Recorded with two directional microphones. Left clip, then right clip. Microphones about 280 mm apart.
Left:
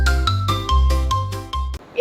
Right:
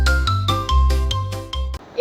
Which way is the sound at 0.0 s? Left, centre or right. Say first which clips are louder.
Right 1 dB; centre.